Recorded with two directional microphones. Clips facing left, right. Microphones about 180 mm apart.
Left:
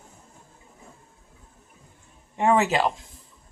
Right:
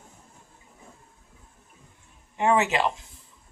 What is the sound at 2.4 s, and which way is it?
Speech, 35° left (ahead or behind).